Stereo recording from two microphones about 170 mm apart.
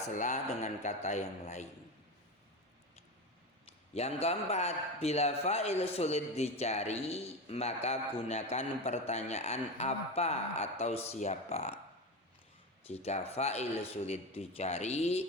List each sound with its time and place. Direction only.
0.1 s speech: 45° left (ahead or behind)
3.9 s a man's voice: 40° left (ahead or behind)
12.9 s a man's voice: 40° left (ahead or behind)